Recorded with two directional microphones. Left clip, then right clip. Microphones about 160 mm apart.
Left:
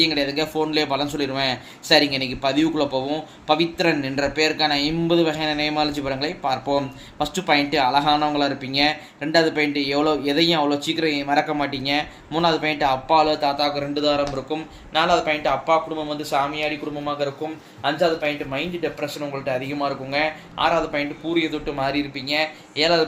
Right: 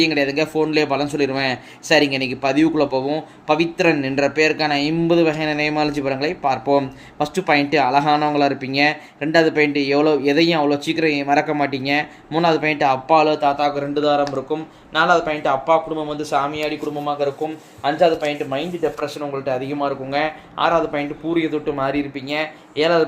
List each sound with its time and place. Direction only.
0.0 s a man's voice: 50° right (ahead or behind)
17.8 s a man's voice: 35° right (ahead or behind)